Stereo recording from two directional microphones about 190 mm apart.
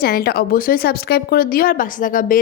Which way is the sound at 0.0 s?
55° left (ahead or behind).